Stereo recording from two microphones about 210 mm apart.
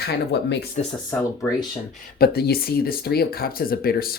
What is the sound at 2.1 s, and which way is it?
Speech, 50° left (ahead or behind).